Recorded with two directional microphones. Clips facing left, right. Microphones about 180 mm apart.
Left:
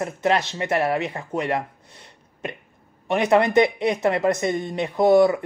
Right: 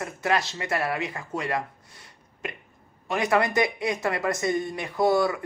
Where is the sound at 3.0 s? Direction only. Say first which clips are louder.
Left 5 dB; 25° left (ahead or behind).